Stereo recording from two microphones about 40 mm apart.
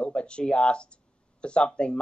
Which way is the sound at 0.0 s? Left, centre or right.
Left.